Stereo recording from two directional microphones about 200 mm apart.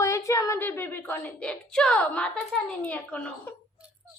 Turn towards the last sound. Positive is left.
turn(degrees=5)  # may be behind; listen again after turning